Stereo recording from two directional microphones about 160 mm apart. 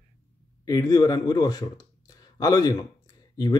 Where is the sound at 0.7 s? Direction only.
20° left (ahead or behind).